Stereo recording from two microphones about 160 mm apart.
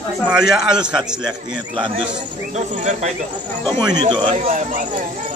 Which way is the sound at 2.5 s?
45° right (ahead or behind).